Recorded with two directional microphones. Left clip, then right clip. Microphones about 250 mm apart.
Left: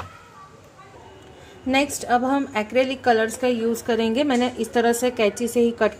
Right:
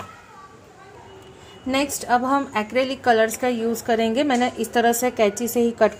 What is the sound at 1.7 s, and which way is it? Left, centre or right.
A woman's voice, centre.